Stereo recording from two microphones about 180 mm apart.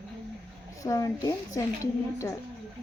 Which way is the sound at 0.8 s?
20° left (ahead or behind).